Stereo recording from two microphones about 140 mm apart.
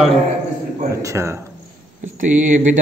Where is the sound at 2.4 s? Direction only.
60° right (ahead or behind).